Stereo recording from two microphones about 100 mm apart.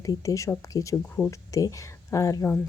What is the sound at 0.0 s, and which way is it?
Speech, 35° left (ahead or behind).